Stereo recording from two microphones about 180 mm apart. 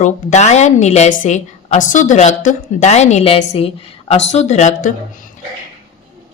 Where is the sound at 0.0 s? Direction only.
40° left (ahead or behind).